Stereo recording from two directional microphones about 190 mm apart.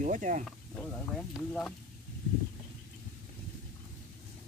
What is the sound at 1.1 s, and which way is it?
Speech, 5° left (ahead or behind).